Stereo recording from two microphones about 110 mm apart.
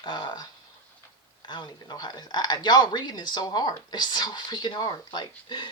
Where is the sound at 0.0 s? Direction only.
45° left (ahead or behind).